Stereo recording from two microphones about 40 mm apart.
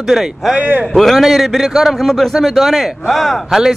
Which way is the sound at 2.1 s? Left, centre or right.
Centre.